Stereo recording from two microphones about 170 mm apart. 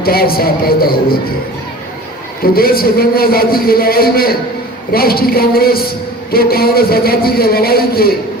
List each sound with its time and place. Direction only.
0.0 s a man's voice: 65° left (ahead or behind)
2.4 s a man's voice: 60° left (ahead or behind)